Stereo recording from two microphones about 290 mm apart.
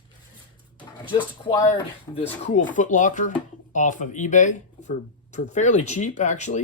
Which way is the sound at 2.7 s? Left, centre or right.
Left.